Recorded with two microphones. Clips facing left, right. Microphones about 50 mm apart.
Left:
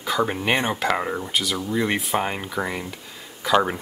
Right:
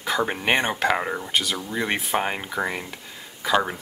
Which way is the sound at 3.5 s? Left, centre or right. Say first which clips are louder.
Left 3 dB; centre.